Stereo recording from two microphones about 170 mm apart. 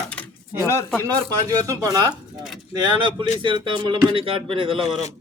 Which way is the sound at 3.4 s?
30° right (ahead or behind).